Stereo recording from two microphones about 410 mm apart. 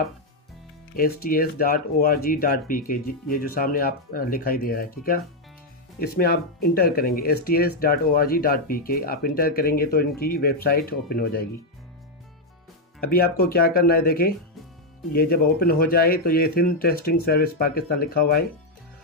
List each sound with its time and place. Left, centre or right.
0.9 s speech: left
13.0 s speech: left